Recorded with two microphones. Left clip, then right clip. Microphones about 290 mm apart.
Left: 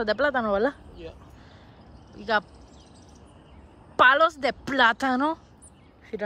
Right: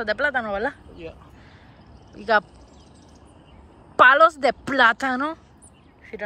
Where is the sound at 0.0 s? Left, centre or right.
Centre.